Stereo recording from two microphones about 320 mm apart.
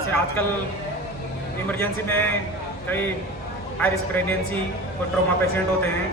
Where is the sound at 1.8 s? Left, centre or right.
Centre.